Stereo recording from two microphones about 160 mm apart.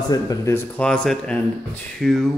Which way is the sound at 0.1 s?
20° left (ahead or behind).